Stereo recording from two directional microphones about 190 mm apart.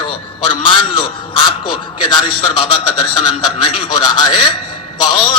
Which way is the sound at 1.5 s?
25° left (ahead or behind).